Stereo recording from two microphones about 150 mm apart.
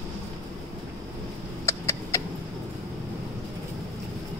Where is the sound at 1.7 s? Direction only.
20° left (ahead or behind).